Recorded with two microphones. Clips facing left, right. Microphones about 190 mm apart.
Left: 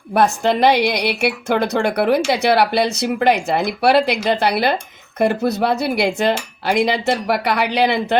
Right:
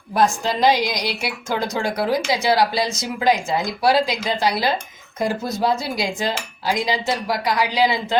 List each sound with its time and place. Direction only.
0.1 s a woman's voice: 65° left (ahead or behind)